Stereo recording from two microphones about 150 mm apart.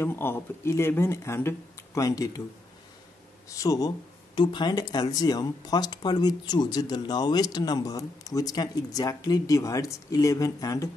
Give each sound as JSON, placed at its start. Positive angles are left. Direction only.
{"t": 0.0, "sound": "speech", "side_deg": 15}
{"t": 3.4, "sound": "speech", "side_deg": 20}